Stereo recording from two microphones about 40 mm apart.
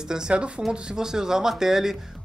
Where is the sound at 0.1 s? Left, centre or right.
Centre.